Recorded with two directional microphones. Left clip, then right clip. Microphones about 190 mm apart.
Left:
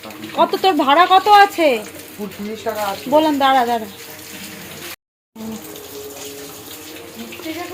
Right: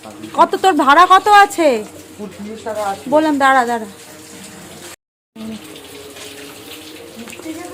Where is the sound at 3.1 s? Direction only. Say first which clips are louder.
Right 1 dB; 5° right (ahead or behind).